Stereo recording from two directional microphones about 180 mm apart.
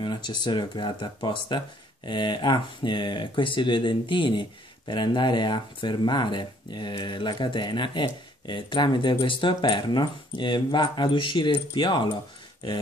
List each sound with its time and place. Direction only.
0.0 s speech: 25° left (ahead or behind)